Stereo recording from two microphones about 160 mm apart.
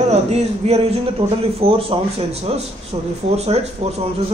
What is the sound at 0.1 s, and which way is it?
A man's voice, 40° right (ahead or behind).